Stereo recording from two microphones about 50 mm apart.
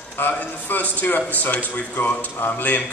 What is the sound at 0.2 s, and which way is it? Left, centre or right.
A man's voice, left.